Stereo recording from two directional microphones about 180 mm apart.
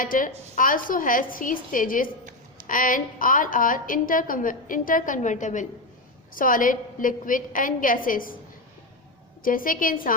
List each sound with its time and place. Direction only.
0.0 s a woman's voice: 50° left (ahead or behind)
9.4 s a woman's voice: 50° left (ahead or behind)